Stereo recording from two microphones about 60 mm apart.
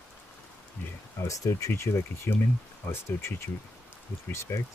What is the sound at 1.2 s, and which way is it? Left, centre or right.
Speech, left.